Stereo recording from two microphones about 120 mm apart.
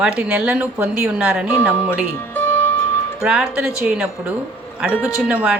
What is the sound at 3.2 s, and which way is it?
Speech, 10° right (ahead or behind).